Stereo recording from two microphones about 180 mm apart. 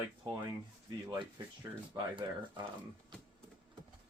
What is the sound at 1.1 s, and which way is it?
Speech, 20° right (ahead or behind).